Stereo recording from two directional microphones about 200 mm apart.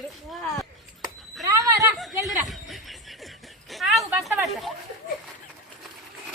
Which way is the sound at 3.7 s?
Centre (ahead or behind).